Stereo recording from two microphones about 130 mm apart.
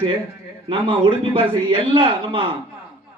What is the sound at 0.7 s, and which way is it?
A man's voice, 45° right (ahead or behind).